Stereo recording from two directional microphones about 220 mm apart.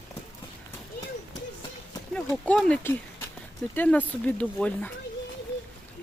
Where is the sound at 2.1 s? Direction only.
5° left (ahead or behind).